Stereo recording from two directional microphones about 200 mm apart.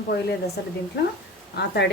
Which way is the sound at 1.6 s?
55° left (ahead or behind).